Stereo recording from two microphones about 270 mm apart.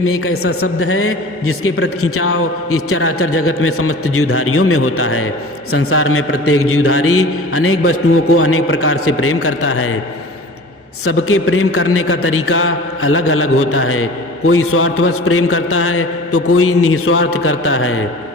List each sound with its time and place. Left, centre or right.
0.0 s a man's voice: left
11.0 s a man's voice: left